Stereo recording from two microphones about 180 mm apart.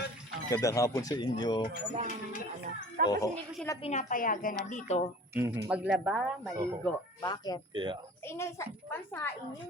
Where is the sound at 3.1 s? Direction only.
20° left (ahead or behind).